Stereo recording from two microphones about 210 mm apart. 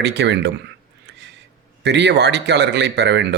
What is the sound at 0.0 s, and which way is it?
Speech, 55° right (ahead or behind).